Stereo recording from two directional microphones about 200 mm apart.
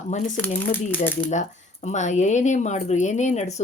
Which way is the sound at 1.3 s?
35° left (ahead or behind).